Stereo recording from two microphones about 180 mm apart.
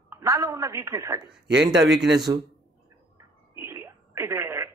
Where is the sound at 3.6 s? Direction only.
15° right (ahead or behind).